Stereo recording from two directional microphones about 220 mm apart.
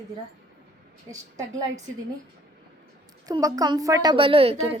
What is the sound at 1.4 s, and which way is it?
Speech, 15° right (ahead or behind).